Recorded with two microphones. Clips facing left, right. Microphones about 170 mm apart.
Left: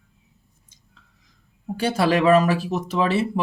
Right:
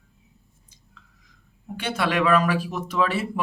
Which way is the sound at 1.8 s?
30° left (ahead or behind).